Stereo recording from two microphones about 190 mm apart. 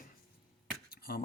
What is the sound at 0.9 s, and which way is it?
Beatboxing, 50° left (ahead or behind).